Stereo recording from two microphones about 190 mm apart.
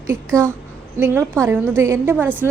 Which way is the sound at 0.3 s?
5° left (ahead or behind).